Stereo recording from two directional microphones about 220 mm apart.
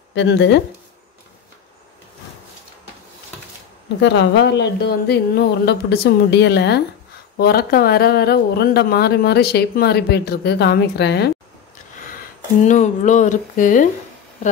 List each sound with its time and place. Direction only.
0.1 s speech: 55° left (ahead or behind)
4.0 s speech: 55° left (ahead or behind)
12.6 s speech: 35° left (ahead or behind)